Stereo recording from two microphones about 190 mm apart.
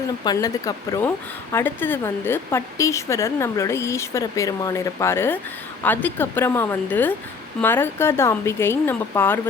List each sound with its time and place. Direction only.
0.3 s a woman's voice: 20° left (ahead or behind)